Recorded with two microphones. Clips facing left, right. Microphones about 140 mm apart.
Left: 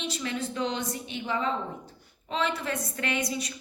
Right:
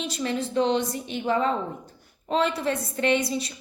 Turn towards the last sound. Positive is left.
turn(degrees=-25)  # may be behind; listen again after turning